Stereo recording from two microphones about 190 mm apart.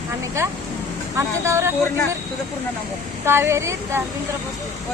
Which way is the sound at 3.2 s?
15° right (ahead or behind).